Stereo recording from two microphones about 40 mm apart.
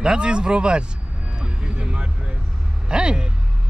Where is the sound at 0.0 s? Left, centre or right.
Right.